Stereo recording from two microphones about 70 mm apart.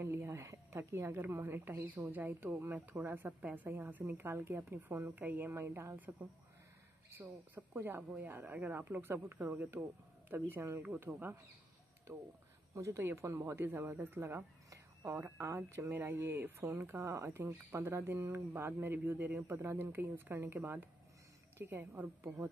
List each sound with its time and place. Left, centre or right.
0.0 s a woman's voice: right
5.1 s a woman's voice: right
7.7 s a woman's voice: right
12.7 s a woman's voice: right
14.7 s a sound: right
15.1 s a woman's voice: right
17.4 s a woman's voice: right